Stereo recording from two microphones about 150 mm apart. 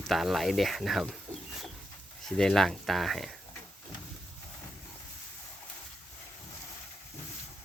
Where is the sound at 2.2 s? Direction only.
5° left (ahead or behind).